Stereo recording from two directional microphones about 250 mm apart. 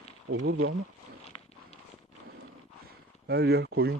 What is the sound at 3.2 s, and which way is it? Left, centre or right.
Speech, right.